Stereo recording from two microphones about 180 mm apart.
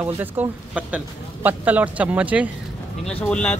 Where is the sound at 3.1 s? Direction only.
5° left (ahead or behind).